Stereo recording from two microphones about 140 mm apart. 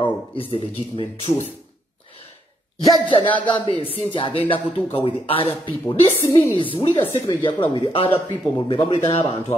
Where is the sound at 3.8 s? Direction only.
40° left (ahead or behind).